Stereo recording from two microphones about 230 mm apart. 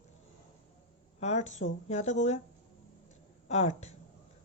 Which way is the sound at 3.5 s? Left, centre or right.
Left.